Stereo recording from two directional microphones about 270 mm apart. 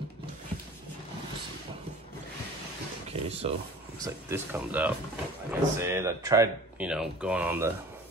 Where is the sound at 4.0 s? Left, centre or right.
Centre.